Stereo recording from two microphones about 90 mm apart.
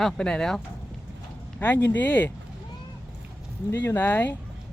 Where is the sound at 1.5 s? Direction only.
20° left (ahead or behind).